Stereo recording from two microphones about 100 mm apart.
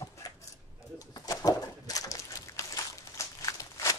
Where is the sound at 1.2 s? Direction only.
35° left (ahead or behind).